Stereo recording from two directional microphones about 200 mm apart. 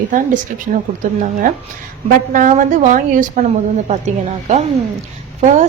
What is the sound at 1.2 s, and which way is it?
A woman's voice, 40° right (ahead or behind).